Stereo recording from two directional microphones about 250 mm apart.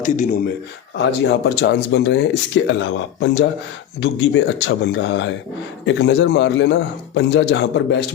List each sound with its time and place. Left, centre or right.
0.0 s speech: left
0.9 s speech: left